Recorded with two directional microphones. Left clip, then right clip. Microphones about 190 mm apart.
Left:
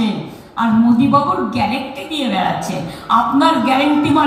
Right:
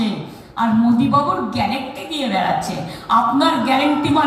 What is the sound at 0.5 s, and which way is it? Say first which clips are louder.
Speech: left 2 dB; 35° right (ahead or behind).